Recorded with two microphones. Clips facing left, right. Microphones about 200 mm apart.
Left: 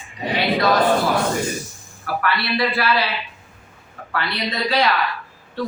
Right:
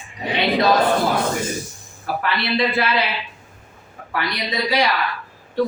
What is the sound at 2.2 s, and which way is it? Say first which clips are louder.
Speech: even; 20° right (ahead or behind).